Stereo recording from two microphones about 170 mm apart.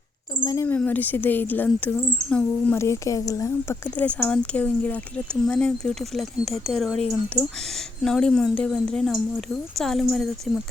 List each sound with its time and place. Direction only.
0.3 s speech: 15° left (ahead or behind); by 7.0 s centre (ahead or behind)
8.0 s speech: 5° left (ahead or behind)